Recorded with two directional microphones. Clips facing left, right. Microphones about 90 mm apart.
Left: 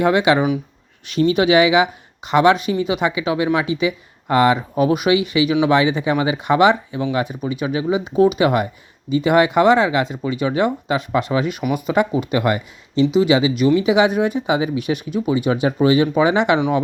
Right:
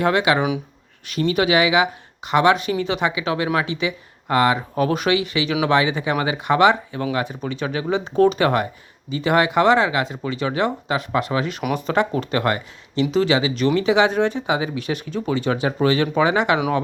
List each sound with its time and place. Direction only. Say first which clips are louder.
0.0 s speech: left 3 dB; 20° left (ahead or behind)